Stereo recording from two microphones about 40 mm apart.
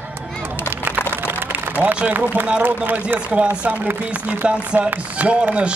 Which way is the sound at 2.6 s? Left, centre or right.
Right.